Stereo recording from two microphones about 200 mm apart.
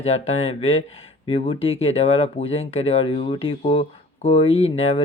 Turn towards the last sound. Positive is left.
turn(degrees=30)  # may be behind; listen again after turning